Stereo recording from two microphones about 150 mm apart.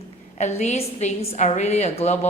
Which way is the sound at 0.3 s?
50° left (ahead or behind).